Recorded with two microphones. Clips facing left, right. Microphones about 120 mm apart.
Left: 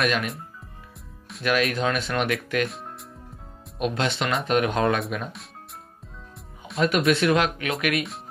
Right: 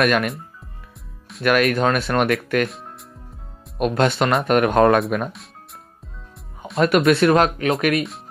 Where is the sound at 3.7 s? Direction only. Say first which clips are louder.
Right 7 dB; 55° right (ahead or behind).